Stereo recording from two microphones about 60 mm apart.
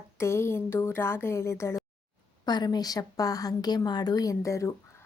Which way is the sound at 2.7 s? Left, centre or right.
Left.